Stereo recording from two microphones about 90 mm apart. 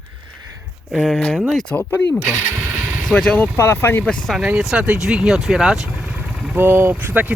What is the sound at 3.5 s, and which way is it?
Speech, 30° left (ahead or behind).